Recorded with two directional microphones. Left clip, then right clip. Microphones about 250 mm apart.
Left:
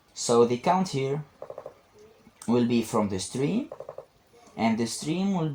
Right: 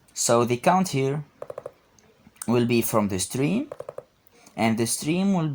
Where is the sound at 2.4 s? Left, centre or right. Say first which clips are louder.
Right 2 dB; right.